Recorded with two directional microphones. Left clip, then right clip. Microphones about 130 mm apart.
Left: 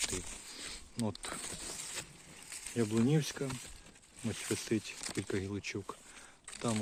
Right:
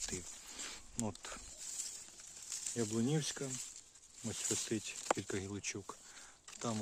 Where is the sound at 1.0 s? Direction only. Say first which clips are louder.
Left 5 dB; 5° left (ahead or behind).